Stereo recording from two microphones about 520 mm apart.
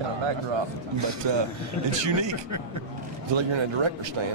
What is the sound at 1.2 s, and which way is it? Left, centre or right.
Speech, right.